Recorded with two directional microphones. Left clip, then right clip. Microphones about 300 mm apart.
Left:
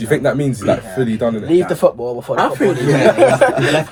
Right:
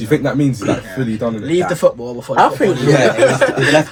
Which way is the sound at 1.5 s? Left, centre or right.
Centre.